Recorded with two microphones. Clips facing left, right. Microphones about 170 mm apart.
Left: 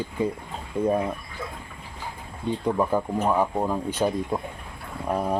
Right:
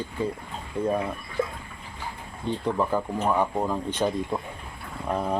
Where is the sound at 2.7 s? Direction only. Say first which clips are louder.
Left 2 dB; 10° left (ahead or behind).